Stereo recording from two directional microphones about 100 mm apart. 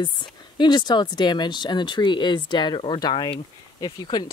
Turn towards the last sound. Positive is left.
turn(degrees=45)  # may be behind; listen again after turning